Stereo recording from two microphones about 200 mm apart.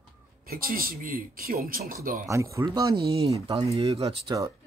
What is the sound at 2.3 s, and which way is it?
Speech, 15° right (ahead or behind).